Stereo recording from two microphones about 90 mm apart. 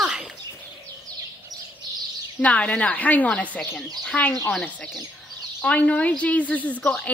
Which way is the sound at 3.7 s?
5° left (ahead or behind).